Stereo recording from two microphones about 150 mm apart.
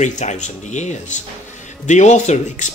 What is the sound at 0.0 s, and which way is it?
Speech, 50° left (ahead or behind).